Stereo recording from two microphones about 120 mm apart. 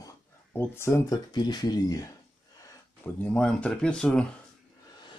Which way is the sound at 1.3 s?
35° left (ahead or behind).